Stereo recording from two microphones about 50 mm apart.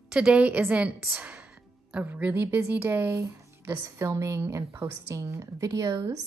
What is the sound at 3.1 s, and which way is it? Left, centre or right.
Speech, right.